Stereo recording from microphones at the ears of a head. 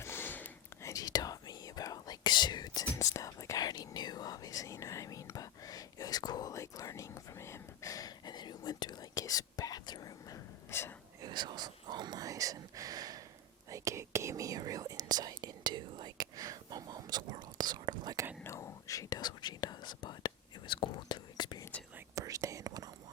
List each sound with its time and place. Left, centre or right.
0.8 s whispering: left
11.2 s whispering: right
18.4 s whispering: left
22.1 s whispering: right